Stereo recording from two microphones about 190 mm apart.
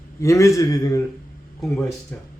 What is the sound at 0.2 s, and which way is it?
Speech, 15° left (ahead or behind).